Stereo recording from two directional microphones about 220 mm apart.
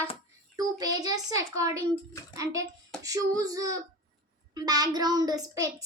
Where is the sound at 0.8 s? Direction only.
15° right (ahead or behind).